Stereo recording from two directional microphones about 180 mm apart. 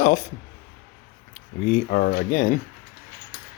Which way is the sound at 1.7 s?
50° left (ahead or behind).